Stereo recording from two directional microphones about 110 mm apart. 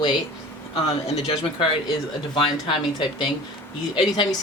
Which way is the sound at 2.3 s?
45° left (ahead or behind).